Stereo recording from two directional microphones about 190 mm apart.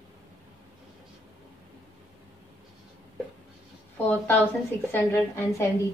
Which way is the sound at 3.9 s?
10° left (ahead or behind).